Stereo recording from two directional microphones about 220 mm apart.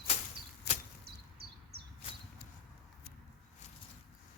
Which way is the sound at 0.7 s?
45° left (ahead or behind).